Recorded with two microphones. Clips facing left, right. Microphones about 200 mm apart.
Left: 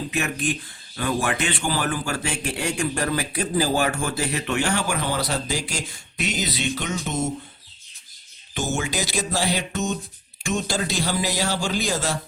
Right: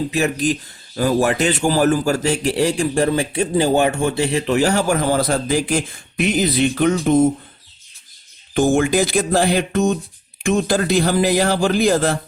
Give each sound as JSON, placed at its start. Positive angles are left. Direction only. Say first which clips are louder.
{"t": 0.1, "sound": "a man's voice", "louder": "right 7 dB", "side_deg": -35}
{"t": 8.5, "sound": "a man's voice", "louder": "right 11 dB", "side_deg": -55}